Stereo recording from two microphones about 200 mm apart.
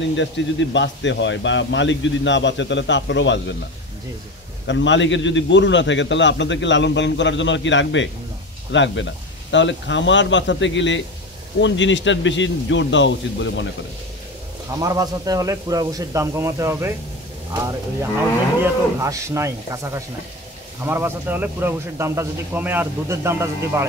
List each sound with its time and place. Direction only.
0.1 s a man's voice: 65° left (ahead or behind)
4.6 s a man's voice: 65° left (ahead or behind)
14.8 s a man's voice: 20° right (ahead or behind)
18.6 s a man's voice: 15° right (ahead or behind)